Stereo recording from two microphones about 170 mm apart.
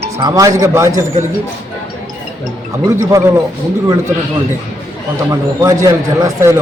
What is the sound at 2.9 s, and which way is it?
Speech, 15° right (ahead or behind).